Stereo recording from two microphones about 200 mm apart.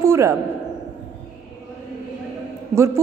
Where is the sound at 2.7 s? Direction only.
15° right (ahead or behind).